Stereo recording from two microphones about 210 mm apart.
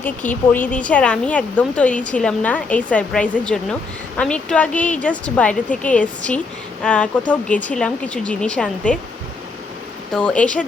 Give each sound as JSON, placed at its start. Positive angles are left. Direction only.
{"t": 0.0, "sound": "a woman's voice", "side_deg": 10}
{"t": 10.1, "sound": "speech", "side_deg": 5}